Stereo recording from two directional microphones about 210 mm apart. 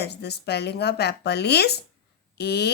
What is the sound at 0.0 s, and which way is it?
Speech, 50° left (ahead or behind).